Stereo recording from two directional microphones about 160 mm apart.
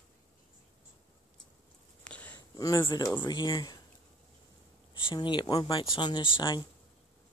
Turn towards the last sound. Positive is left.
turn(degrees=30)  # may be behind; listen again after turning